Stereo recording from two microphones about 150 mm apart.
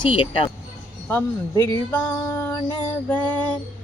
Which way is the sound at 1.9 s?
15° left (ahead or behind).